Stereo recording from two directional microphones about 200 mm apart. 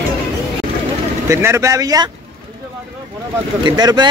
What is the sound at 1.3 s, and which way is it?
Speech, 15° right (ahead or behind).